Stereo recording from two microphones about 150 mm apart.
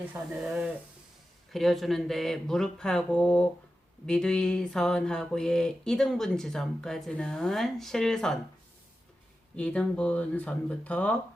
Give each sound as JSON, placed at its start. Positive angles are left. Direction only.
{"t": 0.4, "sound": "mantra", "side_deg": -5}
{"t": 9.6, "sound": "speech", "side_deg": 10}